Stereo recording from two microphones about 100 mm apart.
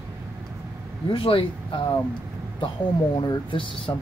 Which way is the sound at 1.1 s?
60° left (ahead or behind).